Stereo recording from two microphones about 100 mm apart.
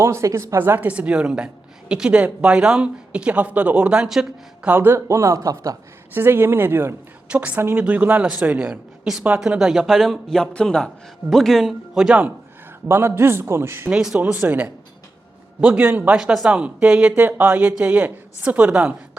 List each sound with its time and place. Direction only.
0.0 s speech: 30° right (ahead or behind); by 4.7 s 10° right (ahead or behind)
4.7 s speech: 20° right (ahead or behind)
6.1 s a man's voice: 20° right (ahead or behind)
12.9 s speech: 25° right (ahead or behind)
13.9 s speech: 5° right (ahead or behind)
16.1 s speech: 5° right (ahead or behind)